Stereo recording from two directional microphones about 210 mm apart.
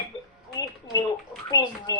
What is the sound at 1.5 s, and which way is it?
Speech, 20° left (ahead or behind).